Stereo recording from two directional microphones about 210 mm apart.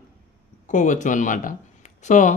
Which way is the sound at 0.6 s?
35° left (ahead or behind).